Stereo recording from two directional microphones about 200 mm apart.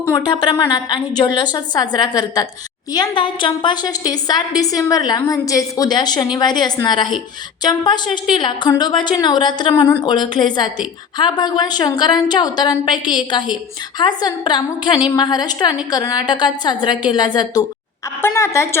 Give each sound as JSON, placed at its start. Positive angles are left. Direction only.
{"t": 0.0, "sound": "a woman's voice", "side_deg": 20}